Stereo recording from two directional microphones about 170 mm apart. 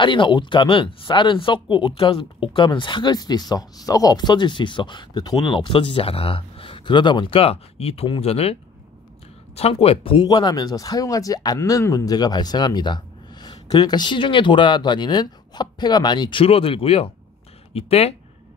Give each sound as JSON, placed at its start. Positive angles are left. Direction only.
{"t": 0.0, "sound": "speech", "side_deg": 30}
{"t": 9.6, "sound": "speech", "side_deg": 35}